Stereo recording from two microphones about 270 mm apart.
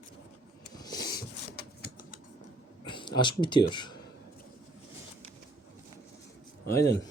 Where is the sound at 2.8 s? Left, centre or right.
Centre.